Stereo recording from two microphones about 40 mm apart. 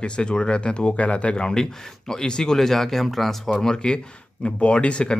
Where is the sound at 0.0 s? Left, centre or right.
Left; by 3.3 s centre.